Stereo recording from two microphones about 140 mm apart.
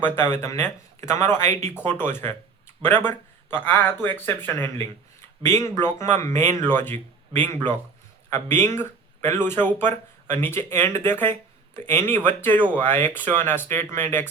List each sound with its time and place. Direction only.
0.0 s speech: 15° left (ahead or behind)